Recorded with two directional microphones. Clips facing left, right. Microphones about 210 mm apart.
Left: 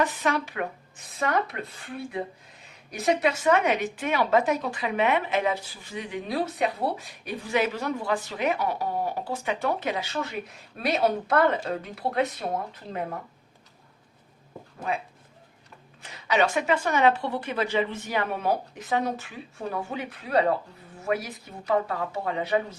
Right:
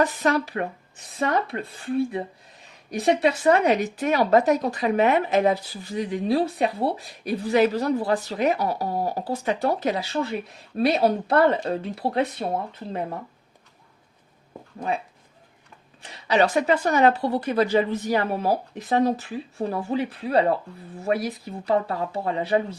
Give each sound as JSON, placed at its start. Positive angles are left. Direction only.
{"t": 0.0, "sound": "speech", "side_deg": -40}
{"t": 16.0, "sound": "speech", "side_deg": -35}